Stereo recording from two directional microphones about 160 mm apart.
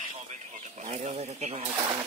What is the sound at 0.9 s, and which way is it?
Speech, 45° right (ahead or behind).